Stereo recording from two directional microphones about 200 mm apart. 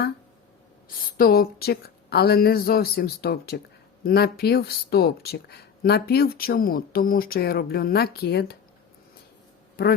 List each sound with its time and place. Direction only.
1.1 s speech: 50° left (ahead or behind)